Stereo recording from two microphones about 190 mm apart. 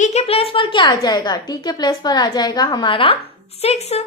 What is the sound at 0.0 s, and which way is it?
A woman's voice, 35° left (ahead or behind).